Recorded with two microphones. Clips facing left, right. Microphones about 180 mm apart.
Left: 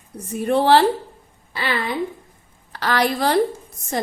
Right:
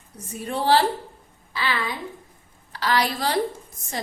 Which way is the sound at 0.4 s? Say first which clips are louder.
Left 5 dB; 60° left (ahead or behind).